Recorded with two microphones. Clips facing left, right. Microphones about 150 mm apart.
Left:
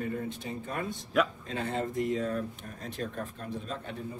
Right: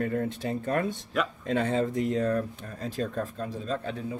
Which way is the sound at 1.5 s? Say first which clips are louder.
Right 6 dB; 80° right.